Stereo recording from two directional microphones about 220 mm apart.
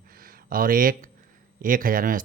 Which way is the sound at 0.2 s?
40° right (ahead or behind).